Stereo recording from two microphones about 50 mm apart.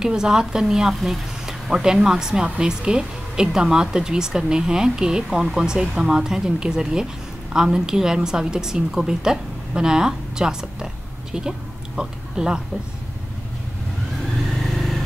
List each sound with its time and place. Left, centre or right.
0.0 s speech: centre
2.4 s speech: right
14.6 s vehicle: centre